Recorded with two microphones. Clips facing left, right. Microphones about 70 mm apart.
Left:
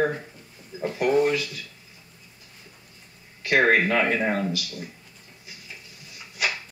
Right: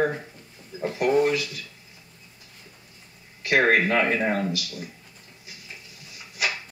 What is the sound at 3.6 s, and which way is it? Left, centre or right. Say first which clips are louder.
Speech: even; centre.